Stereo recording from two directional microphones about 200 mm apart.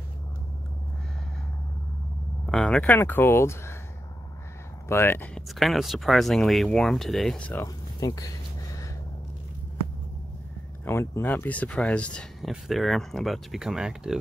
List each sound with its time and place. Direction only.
2.5 s speech: 5° left (ahead or behind)
4.8 s speech: 10° left (ahead or behind)
7.6 s speech: 15° left (ahead or behind)
10.9 s speech: 15° left (ahead or behind); by 14.1 s 5° right (ahead or behind)